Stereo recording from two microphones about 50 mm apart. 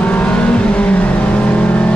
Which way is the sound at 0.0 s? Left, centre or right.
Left.